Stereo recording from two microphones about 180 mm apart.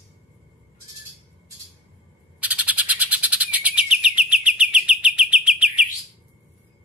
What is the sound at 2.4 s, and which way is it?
Bird, 5° right (ahead or behind).